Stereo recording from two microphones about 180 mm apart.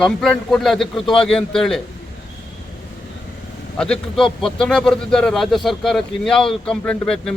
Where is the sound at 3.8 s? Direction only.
5° left (ahead or behind).